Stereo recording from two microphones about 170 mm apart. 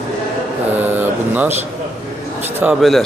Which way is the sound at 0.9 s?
10° right (ahead or behind).